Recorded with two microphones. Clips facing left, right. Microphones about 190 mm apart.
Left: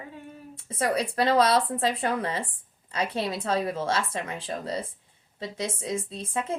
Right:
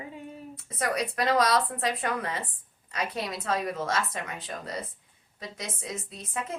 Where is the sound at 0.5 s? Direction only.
30° left (ahead or behind).